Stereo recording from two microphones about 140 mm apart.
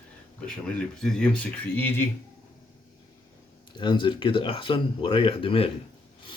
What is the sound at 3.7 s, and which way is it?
Speech, 35° left (ahead or behind).